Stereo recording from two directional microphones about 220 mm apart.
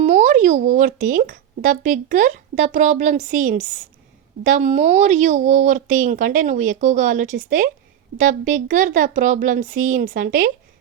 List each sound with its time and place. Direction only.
0.0 s speech: 35° right (ahead or behind)